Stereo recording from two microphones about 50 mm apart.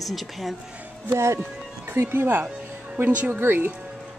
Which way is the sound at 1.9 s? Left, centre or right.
Right.